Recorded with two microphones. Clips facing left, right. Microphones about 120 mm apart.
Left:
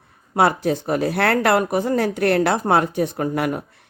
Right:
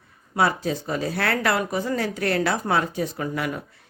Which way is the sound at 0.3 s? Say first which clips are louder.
Left 5 dB; 60° left (ahead or behind).